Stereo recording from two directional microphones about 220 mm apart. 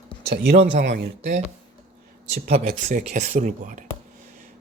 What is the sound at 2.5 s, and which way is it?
Speech, 35° right (ahead or behind).